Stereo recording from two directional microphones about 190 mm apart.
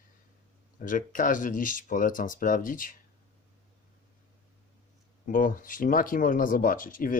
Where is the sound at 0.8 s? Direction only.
45° left (ahead or behind).